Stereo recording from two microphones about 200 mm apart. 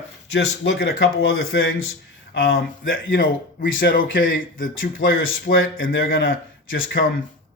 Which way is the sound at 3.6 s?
70° left (ahead or behind).